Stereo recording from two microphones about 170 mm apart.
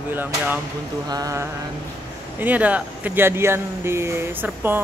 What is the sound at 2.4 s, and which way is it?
Speech, 10° right (ahead or behind).